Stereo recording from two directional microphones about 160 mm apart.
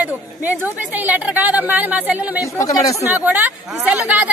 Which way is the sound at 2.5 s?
20° left (ahead or behind).